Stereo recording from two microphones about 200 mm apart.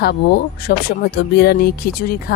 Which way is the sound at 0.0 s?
50° left (ahead or behind).